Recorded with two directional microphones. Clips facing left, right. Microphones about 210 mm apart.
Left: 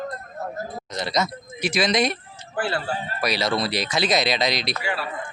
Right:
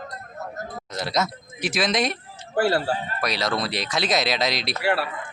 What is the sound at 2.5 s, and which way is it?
Speech, 40° right (ahead or behind).